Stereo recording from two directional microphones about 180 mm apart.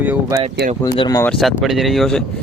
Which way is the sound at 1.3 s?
Centre (ahead or behind).